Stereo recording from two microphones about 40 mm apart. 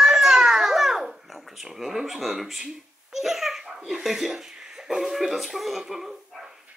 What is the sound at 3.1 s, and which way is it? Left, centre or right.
Babbling, centre.